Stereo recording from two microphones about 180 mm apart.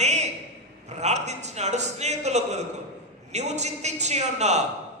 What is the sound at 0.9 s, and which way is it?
A man's voice, 40° right (ahead or behind).